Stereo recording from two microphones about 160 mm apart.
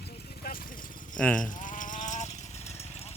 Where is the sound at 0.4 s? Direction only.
75° left (ahead or behind).